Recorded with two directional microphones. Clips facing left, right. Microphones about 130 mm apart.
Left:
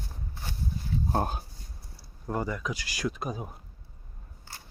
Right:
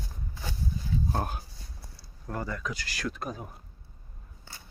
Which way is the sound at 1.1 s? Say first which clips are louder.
Left 3 dB; 25° left (ahead or behind).